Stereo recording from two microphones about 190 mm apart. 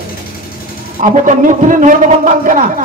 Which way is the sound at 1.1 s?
40° right (ahead or behind).